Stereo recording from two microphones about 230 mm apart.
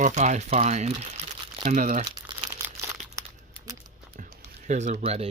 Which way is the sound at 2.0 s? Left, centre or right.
Right.